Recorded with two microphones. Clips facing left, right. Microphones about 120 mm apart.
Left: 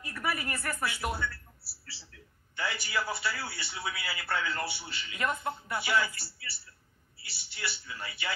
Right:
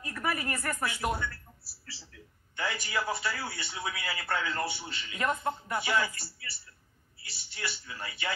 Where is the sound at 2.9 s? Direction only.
25° right (ahead or behind).